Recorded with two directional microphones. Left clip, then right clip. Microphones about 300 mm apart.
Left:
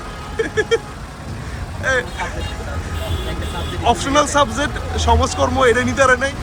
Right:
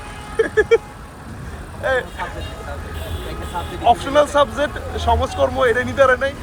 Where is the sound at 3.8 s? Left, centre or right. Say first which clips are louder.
Right 1 dB; centre.